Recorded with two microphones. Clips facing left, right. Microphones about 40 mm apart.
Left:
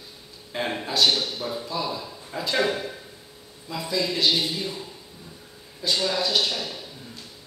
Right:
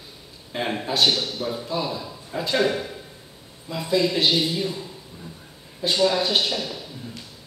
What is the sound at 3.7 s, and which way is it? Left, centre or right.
Speech, centre.